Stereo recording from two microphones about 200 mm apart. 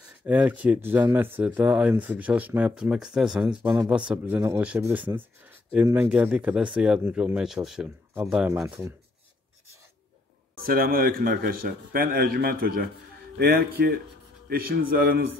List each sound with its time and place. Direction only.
0.2 s speech: 5° right (ahead or behind)
10.6 s a man's voice: 45° right (ahead or behind)